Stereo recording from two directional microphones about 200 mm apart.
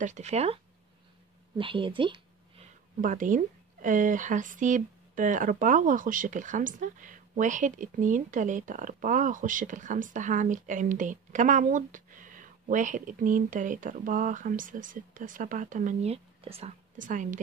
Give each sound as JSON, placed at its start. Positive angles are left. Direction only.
{"t": 0.0, "sound": "a woman's voice", "side_deg": -35}
{"t": 1.6, "sound": "a woman's voice", "side_deg": -25}
{"t": 3.0, "sound": "a woman's voice", "side_deg": -40}